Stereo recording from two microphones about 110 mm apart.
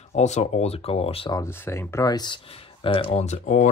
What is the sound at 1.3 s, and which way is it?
Speech, 25° left (ahead or behind).